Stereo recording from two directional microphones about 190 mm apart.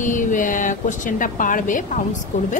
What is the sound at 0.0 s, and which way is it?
A woman's voice, 40° left (ahead or behind).